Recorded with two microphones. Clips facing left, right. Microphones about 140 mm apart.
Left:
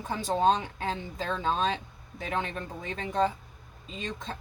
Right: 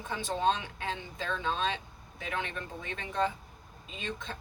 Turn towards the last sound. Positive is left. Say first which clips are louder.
# left 2 dB
turn(degrees=40)  # may be behind; listen again after turning